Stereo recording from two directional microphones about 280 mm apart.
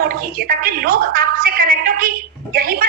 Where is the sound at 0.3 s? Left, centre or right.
Right.